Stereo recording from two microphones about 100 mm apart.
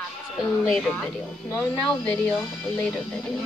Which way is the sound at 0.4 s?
5° left (ahead or behind).